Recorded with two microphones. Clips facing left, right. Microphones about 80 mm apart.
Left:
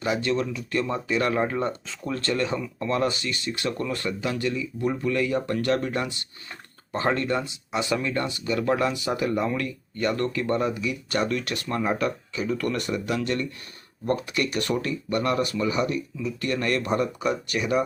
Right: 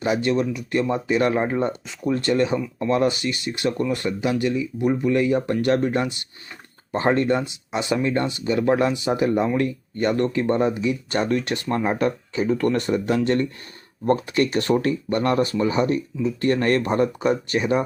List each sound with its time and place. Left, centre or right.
0.0 s speech: right